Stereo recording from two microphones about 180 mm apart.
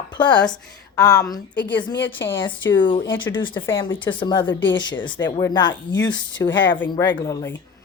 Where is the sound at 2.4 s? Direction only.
25° left (ahead or behind).